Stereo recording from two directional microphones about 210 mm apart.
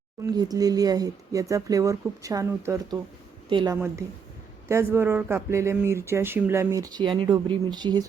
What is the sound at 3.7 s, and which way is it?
Speech, 10° right (ahead or behind).